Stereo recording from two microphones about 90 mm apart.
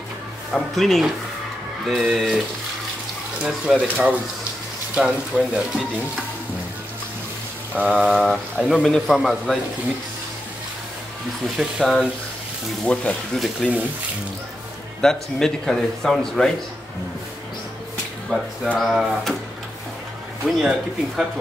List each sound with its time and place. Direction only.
0.5 s a man's voice: 5° left (ahead or behind)
3.4 s speech: 10° right (ahead or behind)
7.7 s mantra: 15° right (ahead or behind)
8.0 s a man's voice: centre (ahead or behind)
11.5 s a man's voice: centre (ahead or behind)
12.8 s speech: 10° left (ahead or behind)
15.0 s a man's voice: 5° left (ahead or behind)
18.8 s a man's voice: centre (ahead or behind)
20.4 s a man's voice: centre (ahead or behind)